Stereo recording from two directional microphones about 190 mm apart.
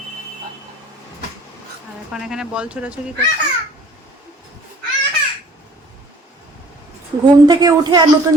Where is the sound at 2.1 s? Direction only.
5° right (ahead or behind).